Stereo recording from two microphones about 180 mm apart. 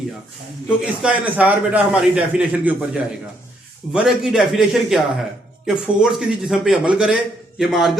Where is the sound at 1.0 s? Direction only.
10° right (ahead or behind).